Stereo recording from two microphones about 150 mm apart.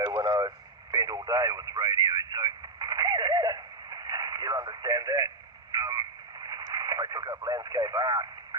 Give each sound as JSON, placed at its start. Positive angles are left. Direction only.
{"t": 0.1, "sound": "radio", "side_deg": -25}